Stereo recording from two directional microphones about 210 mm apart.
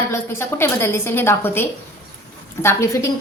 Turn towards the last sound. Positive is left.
turn(degrees=15)  # may be behind; listen again after turning